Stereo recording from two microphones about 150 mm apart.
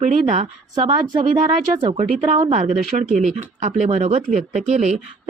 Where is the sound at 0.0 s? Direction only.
45° right (ahead or behind).